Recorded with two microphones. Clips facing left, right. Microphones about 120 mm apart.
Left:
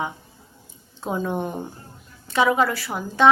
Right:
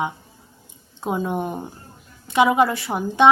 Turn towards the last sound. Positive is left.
turn(degrees=-20)  # may be behind; listen again after turning